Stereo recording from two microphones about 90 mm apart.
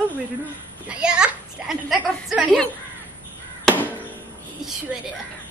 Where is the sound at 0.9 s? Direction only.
10° right (ahead or behind).